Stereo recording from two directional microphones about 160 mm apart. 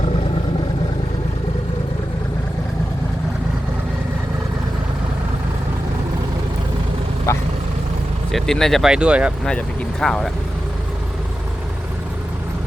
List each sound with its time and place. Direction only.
7.3 s vehicle: 15° left (ahead or behind)
8.3 s speech: centre (ahead or behind)